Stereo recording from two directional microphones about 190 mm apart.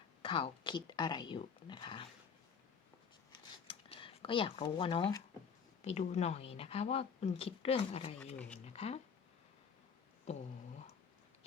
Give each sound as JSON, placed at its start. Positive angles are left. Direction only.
{"t": 0.2, "sound": "a woman's voice", "side_deg": 30}
{"t": 3.7, "sound": "a sound", "side_deg": 30}
{"t": 5.8, "sound": "speech", "side_deg": 35}